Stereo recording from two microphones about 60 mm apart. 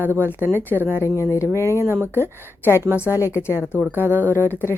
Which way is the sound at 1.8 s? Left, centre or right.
Right.